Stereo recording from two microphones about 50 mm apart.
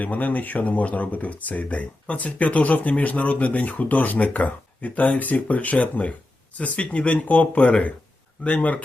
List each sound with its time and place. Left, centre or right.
0.0 s speech: left